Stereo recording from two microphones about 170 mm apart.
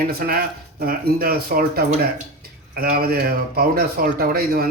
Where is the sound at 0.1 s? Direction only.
60° right (ahead or behind).